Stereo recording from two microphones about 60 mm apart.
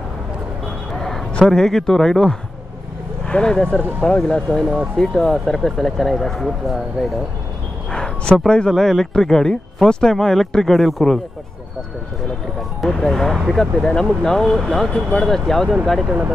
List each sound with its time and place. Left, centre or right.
0.9 s a man's voice: centre
4.9 s speech: centre
7.9 s a man's voice: centre
12.8 s speech: centre